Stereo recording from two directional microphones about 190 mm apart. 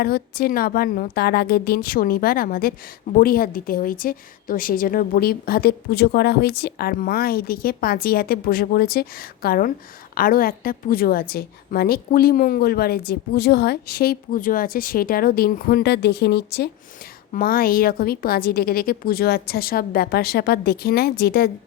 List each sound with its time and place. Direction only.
0.0 s a woman's voice: 55° left (ahead or behind)